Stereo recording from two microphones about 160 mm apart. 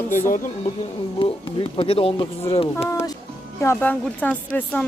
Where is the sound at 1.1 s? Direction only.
35° left (ahead or behind).